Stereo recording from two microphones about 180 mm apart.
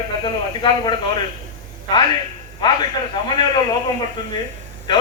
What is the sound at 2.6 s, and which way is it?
A man's voice, 25° left (ahead or behind).